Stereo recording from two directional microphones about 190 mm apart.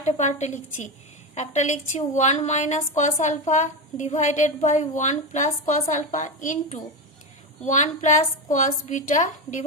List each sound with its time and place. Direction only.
0.2 s a woman's voice: 40° left (ahead or behind)